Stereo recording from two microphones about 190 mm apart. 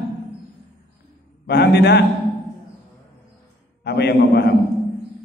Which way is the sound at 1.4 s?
60° left (ahead or behind).